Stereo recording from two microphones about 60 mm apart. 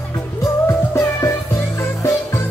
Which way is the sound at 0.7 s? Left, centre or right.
Left.